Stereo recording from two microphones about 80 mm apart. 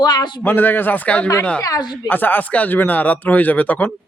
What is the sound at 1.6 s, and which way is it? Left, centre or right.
Speech, left.